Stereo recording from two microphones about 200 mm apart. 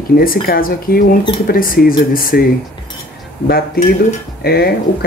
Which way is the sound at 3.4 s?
50° left (ahead or behind).